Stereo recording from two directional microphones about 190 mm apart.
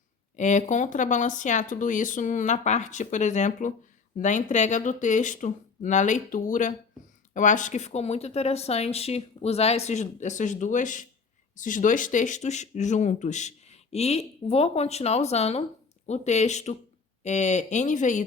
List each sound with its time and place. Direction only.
0.3 s speech: 40° left (ahead or behind)